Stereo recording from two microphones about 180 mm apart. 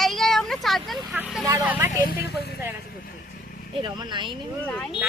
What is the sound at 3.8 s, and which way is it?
Speech, 25° right (ahead or behind).